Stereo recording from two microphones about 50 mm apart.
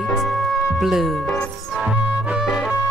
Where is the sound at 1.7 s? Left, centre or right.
Centre.